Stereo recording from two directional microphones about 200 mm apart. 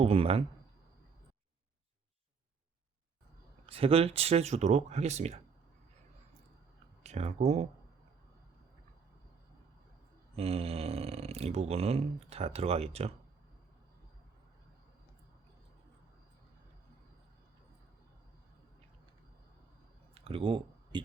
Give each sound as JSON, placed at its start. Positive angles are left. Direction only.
{"t": 0.0, "sound": "speech", "side_deg": -30}
{"t": 3.7, "sound": "speech", "side_deg": -30}
{"t": 7.0, "sound": "speech", "side_deg": -35}
{"t": 10.3, "sound": "speech", "side_deg": -30}
{"t": 20.1, "sound": "a sound", "side_deg": -30}